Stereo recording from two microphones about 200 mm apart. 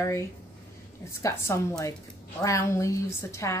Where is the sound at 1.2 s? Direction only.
15° left (ahead or behind).